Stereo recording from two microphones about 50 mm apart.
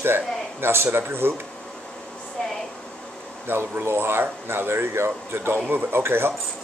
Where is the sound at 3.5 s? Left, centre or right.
Right.